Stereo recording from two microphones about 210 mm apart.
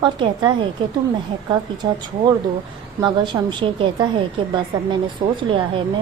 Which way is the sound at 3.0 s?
20° right (ahead or behind).